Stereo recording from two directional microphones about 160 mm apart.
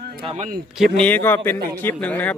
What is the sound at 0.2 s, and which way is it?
Speech, 35° right (ahead or behind).